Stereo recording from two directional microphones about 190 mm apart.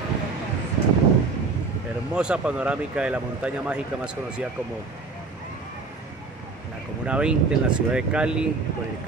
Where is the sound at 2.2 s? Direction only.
5° right (ahead or behind).